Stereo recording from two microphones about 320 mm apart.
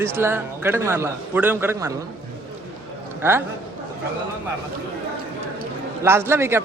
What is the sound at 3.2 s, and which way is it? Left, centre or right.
Speech, centre.